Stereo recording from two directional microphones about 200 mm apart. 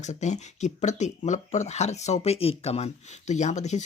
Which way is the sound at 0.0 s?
35° left (ahead or behind).